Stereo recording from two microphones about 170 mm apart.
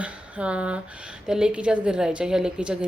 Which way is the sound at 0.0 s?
5° right (ahead or behind).